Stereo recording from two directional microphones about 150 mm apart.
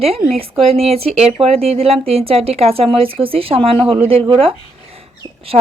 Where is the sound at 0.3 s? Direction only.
40° right (ahead or behind).